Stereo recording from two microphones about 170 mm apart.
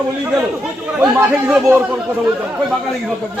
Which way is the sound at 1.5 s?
5° right (ahead or behind).